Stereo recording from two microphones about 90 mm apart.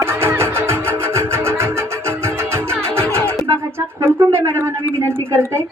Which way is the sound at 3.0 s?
30° right (ahead or behind).